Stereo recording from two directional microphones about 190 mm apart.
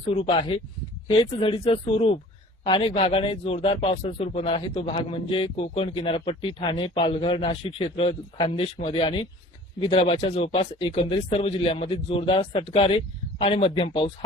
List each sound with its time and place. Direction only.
0.2 s a man's voice: 30° left (ahead or behind)